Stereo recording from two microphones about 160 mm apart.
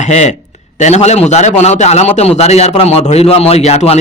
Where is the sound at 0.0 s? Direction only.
45° left (ahead or behind).